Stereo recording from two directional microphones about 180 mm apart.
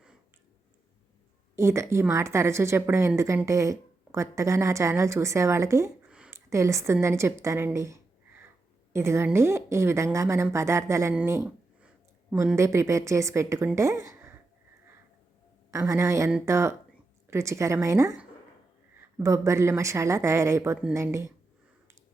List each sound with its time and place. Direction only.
1.5 s a woman's voice: 15° right (ahead or behind)
6.1 s a sound: 5° right (ahead or behind)
6.5 s a woman's voice: 15° right (ahead or behind)
12.5 s a woman's voice: 15° right (ahead or behind)
15.9 s a woman's voice: 15° right (ahead or behind)